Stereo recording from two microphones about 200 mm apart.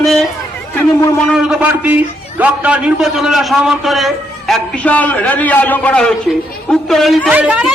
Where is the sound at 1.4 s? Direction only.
5° right (ahead or behind).